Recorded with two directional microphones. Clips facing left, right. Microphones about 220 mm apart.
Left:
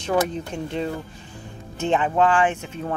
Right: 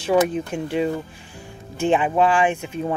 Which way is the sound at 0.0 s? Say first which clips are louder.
Right 4 dB; 5° right (ahead or behind).